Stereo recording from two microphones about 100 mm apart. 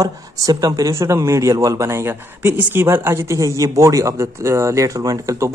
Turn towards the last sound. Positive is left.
turn(degrees=-30)  # may be behind; listen again after turning